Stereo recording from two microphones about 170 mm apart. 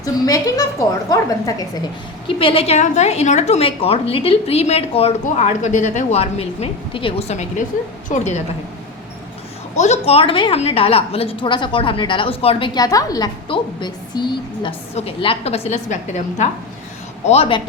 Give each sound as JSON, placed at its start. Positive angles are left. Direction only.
{"t": 0.0, "sound": "a woman's voice", "side_deg": 20}
{"t": 2.2, "sound": "a woman's voice", "side_deg": 30}
{"t": 9.7, "sound": "a woman's voice", "side_deg": 40}